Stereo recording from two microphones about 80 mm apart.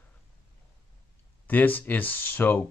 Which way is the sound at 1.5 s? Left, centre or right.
Left.